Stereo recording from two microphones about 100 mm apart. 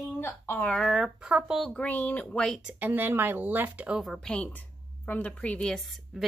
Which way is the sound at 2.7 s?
20° right (ahead or behind).